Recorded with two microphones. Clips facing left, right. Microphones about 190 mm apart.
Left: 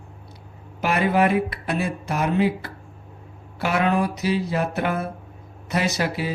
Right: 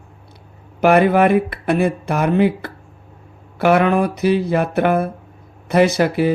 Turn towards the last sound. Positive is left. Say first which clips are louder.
# right 9 dB
turn(degrees=-55)  # may be behind; listen again after turning